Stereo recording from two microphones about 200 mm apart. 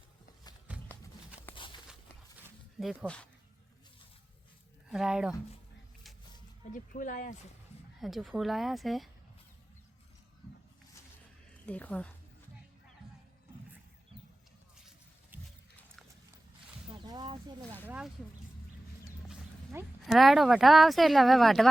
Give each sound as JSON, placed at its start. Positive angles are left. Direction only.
{"t": 0.7, "sound": "a sound", "side_deg": -5}
{"t": 1.5, "sound": "walk", "side_deg": 25}
{"t": 4.9, "sound": "speech", "side_deg": -5}
{"t": 6.7, "sound": "speech", "side_deg": 40}
{"t": 8.0, "sound": "speech", "side_deg": 0}
{"t": 11.5, "sound": "a woman's voice", "side_deg": 5}
{"t": 16.9, "sound": "a sound", "side_deg": -20}
{"t": 17.8, "sound": "speech", "side_deg": -5}
{"t": 19.3, "sound": "speech", "side_deg": -5}